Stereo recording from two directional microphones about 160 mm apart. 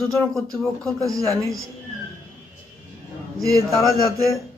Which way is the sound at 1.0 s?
20° right (ahead or behind).